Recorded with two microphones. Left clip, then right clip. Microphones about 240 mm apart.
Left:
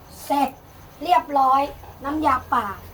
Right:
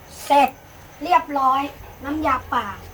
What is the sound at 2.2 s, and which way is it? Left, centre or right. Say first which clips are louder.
Speech: left 1 dB; centre.